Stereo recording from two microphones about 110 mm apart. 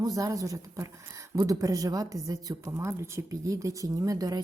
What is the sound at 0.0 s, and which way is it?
Speech, 35° right (ahead or behind).